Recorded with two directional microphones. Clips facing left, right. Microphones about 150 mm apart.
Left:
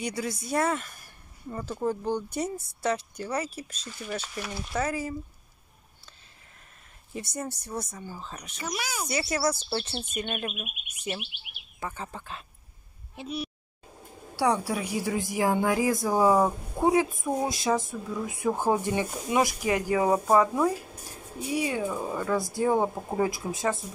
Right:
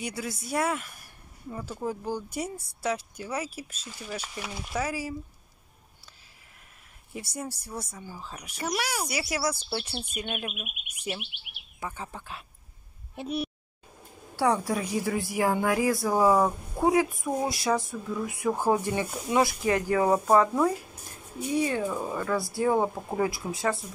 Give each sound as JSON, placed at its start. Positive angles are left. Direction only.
{"t": 0.0, "sound": "speech", "side_deg": -5}
{"t": 7.2, "sound": "speech", "side_deg": -5}
{"t": 8.5, "sound": "speech", "side_deg": -70}
{"t": 9.1, "sound": "speech", "side_deg": -10}
{"t": 13.1, "sound": "speech", "side_deg": -55}
{"t": 14.3, "sound": "a woman's voice", "side_deg": 10}
{"t": 22.8, "sound": "speech", "side_deg": 5}
{"t": 23.1, "sound": "speech", "side_deg": 20}